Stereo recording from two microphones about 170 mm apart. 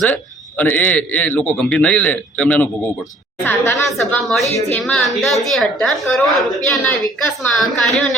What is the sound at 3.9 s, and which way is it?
A woman's voice, centre (ahead or behind).